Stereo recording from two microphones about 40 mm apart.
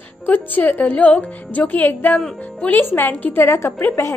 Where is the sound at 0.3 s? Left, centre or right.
Left.